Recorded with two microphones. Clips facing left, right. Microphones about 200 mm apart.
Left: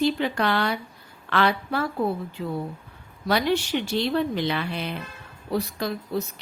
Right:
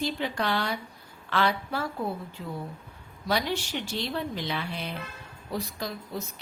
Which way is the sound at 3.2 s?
65° left (ahead or behind).